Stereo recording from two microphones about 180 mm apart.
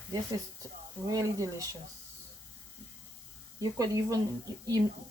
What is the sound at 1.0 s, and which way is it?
Speech, 20° right (ahead or behind).